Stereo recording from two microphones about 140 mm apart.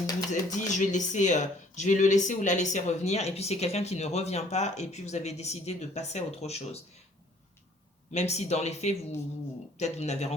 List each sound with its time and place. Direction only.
0.3 s speech: 60° left (ahead or behind)
8.1 s speech: 55° left (ahead or behind)